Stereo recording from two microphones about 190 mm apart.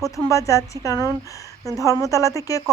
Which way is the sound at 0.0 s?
15° left (ahead or behind).